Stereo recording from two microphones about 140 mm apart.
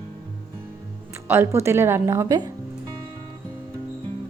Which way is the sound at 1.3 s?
20° right (ahead or behind).